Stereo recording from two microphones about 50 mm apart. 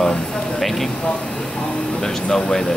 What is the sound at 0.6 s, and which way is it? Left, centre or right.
Speech, centre.